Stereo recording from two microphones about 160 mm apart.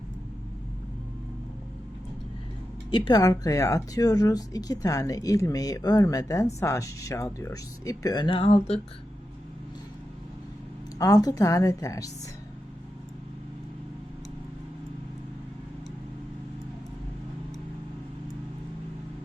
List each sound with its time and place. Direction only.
2.9 s speech: 25° left (ahead or behind)
10.9 s speech: 20° left (ahead or behind)